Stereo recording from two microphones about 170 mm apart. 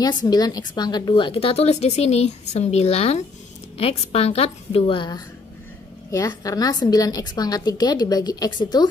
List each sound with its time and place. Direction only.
0.0 s a woman's voice: 25° left (ahead or behind)